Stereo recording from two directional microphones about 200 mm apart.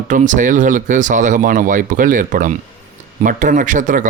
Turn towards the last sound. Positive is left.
turn(degrees=-40)  # may be behind; listen again after turning